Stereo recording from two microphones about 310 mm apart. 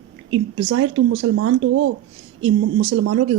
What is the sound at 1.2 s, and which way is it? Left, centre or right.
Speech, right.